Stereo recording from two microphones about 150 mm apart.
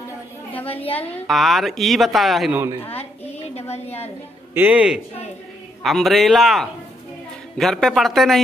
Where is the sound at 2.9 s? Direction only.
45° left (ahead or behind).